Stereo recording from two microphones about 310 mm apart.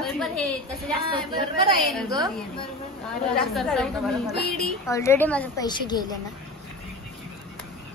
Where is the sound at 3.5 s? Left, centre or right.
Centre.